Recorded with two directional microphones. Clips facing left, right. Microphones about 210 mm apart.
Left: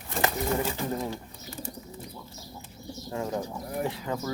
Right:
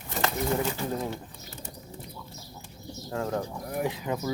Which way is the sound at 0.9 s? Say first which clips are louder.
Even; centre (ahead or behind).